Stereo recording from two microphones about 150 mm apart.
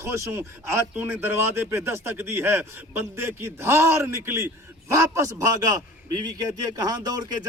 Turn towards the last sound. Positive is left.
turn(degrees=-25)  # may be behind; listen again after turning